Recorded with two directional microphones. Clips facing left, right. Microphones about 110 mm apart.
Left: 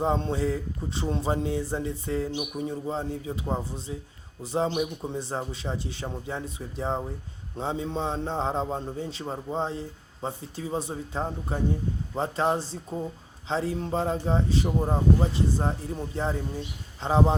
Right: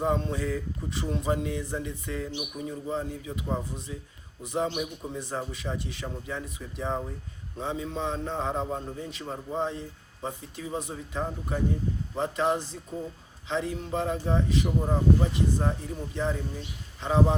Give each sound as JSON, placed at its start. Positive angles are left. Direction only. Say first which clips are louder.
{"t": 0.0, "sound": "a man's voice", "louder": "left 2 dB", "side_deg": 30}
{"t": 17.0, "sound": "speech", "louder": "left 1 dB", "side_deg": 30}